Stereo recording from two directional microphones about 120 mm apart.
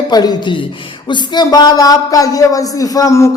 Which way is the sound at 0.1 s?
35° left (ahead or behind).